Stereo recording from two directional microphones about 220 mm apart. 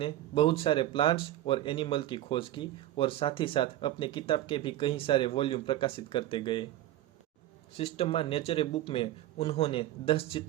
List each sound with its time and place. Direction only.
0.0 s speech: 25° left (ahead or behind)
7.8 s speech: 25° left (ahead or behind)